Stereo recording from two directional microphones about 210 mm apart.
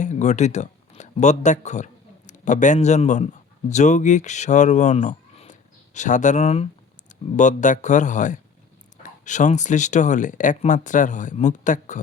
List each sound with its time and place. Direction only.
0.0 s speech: 35° left (ahead or behind)